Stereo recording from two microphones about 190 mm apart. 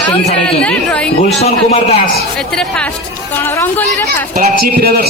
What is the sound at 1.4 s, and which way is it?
Speech, 35° left (ahead or behind).